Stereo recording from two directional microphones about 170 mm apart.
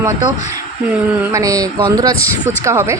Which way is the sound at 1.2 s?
15° right (ahead or behind).